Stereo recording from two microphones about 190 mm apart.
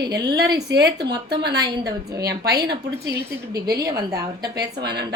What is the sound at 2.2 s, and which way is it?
Speech, 55° right (ahead or behind).